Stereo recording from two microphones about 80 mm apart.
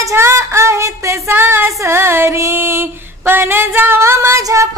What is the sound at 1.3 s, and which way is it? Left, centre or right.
Female singing, right.